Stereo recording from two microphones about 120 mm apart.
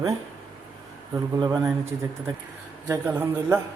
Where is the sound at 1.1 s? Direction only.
30° right (ahead or behind).